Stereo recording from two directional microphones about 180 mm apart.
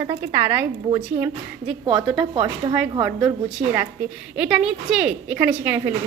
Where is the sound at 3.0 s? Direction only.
Centre (ahead or behind).